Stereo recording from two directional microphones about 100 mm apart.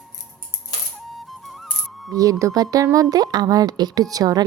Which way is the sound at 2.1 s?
35° right (ahead or behind).